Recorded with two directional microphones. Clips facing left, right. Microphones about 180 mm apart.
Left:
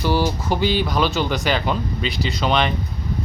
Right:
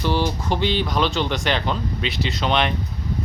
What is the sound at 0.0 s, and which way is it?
Speech, 5° left (ahead or behind).